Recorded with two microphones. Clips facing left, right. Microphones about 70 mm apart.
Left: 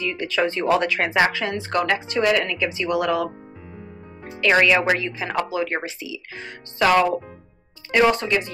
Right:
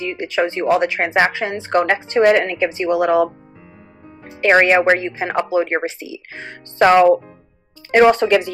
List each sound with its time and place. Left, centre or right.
0.0 s speech: centre; by 2.5 s right
2.6 s speech: right
4.5 s speech: right
7.9 s speech: right